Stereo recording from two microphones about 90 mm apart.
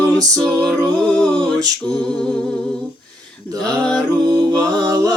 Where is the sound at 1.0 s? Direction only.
10° left (ahead or behind).